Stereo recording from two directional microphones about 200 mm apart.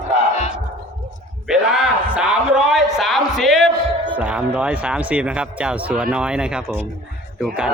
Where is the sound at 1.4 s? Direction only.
5° right (ahead or behind).